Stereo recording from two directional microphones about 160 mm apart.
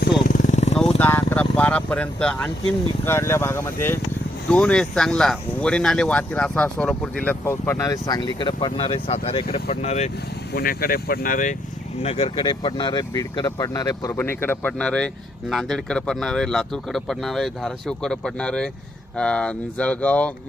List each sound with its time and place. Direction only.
0.3 s vehicle: 55° left (ahead or behind)
0.9 s vehicle: 10° left (ahead or behind)
3.0 s speech: 15° left (ahead or behind); by 10.1 s 45° left (ahead or behind)
10.5 s speech: 65° left (ahead or behind)
12.0 s speech: 40° left (ahead or behind); by 20.3 s 10° left (ahead or behind)